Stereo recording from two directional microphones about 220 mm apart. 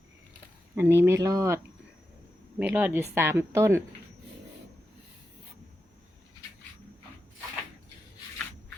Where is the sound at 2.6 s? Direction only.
10° right (ahead or behind).